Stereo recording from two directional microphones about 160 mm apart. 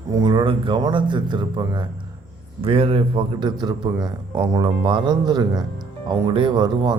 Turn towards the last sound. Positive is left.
turn(degrees=-25)  # may be behind; listen again after turning